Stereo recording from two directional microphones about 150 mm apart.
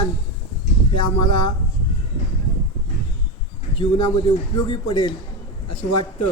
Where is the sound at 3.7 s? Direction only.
35° left (ahead or behind).